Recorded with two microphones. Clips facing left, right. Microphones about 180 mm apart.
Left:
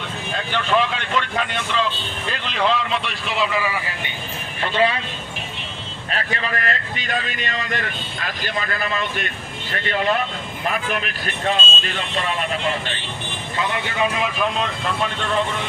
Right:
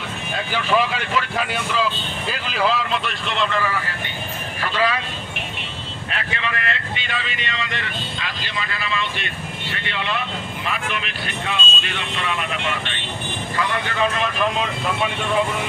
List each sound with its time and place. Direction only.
0.3 s speech: 5° right (ahead or behind); by 4.1 s 15° left (ahead or behind)
4.6 s speech: 25° left (ahead or behind)
6.1 s speech: 40° left (ahead or behind)
13.6 s speech: 20° left (ahead or behind)
14.6 s speech: 10° right (ahead or behind)